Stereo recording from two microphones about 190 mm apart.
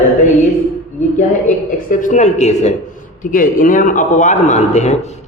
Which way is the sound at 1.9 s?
40° left (ahead or behind).